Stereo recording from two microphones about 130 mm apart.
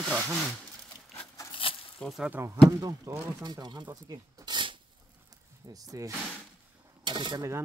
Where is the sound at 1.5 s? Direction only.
45° left (ahead or behind).